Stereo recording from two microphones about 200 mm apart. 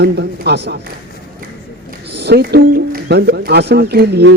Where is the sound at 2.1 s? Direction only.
55° right (ahead or behind).